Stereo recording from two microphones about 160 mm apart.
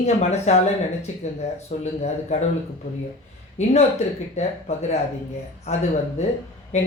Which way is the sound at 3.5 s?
45° left (ahead or behind).